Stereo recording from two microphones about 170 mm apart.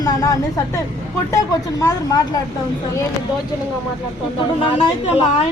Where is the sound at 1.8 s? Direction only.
20° left (ahead or behind).